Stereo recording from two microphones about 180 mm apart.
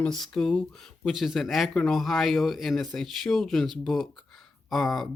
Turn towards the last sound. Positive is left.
turn(degrees=0)  # may be behind; listen again after turning